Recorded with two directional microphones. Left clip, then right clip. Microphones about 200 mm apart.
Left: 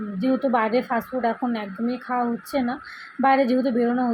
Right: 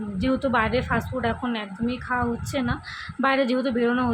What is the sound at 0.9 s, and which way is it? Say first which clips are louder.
A woman's voice: left 2 dB; 20° left (ahead or behind).